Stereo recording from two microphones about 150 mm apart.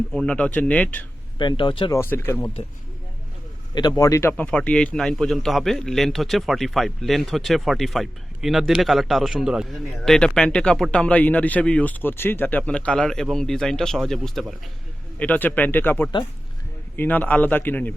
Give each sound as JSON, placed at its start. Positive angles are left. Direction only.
{"t": 0.1, "sound": "a man's voice", "side_deg": 5}
{"t": 1.4, "sound": "speech", "side_deg": 30}
{"t": 1.9, "sound": "a man's voice", "side_deg": 15}
{"t": 3.8, "sound": "a man's voice", "side_deg": 30}